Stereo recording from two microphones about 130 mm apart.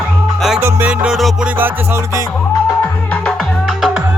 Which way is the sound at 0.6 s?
15° right (ahead or behind).